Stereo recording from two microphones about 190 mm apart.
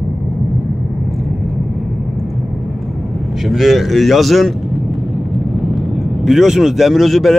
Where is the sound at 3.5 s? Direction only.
Centre (ahead or behind).